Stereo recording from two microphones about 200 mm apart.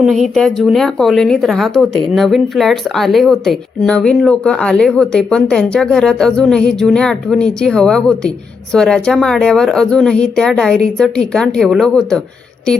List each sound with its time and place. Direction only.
0.0 s a woman's voice: centre (ahead or behind)